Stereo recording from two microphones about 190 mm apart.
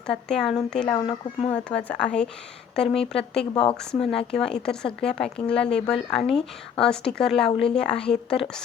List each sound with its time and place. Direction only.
0.1 s speech: 5° left (ahead or behind)
0.9 s speech: 30° left (ahead or behind)
1.5 s speech: 5° left (ahead or behind)